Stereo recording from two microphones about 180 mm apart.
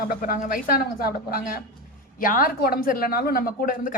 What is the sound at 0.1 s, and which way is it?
Speech, 55° left (ahead or behind).